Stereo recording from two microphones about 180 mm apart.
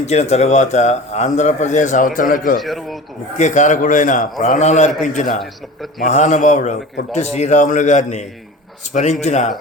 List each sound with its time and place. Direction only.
0.0 s speech: 35° left (ahead or behind)
2.6 s a man's voice: centre (ahead or behind)
3.3 s a man's voice: 40° left (ahead or behind)
6.1 s speech: 40° left (ahead or behind)